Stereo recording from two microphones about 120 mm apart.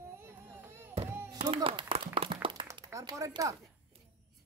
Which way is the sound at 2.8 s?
25° right (ahead or behind).